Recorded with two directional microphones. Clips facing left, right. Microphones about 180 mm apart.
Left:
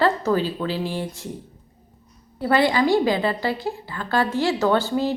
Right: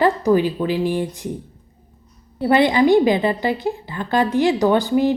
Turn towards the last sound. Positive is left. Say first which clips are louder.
# right 4 dB
turn(degrees=-15)  # may be behind; listen again after turning